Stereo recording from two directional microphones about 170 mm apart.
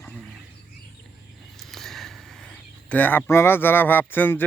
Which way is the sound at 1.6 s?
Centre (ahead or behind).